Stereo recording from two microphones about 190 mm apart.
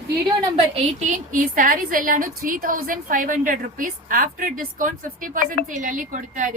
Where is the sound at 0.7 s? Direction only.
40° right (ahead or behind).